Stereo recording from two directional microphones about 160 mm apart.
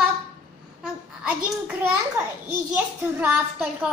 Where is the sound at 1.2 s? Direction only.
10° right (ahead or behind).